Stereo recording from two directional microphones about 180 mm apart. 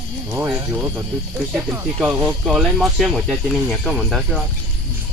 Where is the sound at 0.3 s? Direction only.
15° right (ahead or behind).